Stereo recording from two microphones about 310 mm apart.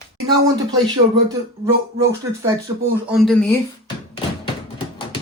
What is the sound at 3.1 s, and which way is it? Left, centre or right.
Speech, centre.